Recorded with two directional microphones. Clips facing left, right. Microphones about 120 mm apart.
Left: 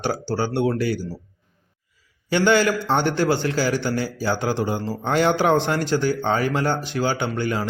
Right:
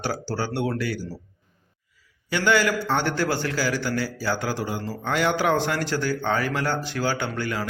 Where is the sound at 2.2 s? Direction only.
30° left (ahead or behind).